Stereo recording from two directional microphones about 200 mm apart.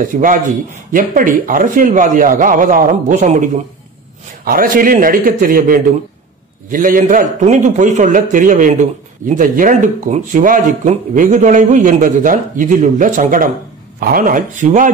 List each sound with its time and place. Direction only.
0.0 s a man's voice: 40° right (ahead or behind)
4.5 s a man's voice: 45° right (ahead or behind)